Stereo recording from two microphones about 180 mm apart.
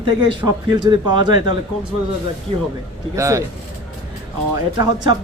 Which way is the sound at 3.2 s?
15° right (ahead or behind).